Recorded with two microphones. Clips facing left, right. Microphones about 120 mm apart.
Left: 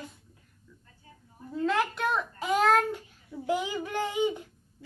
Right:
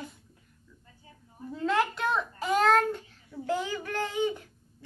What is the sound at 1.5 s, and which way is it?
A child's voice, centre (ahead or behind).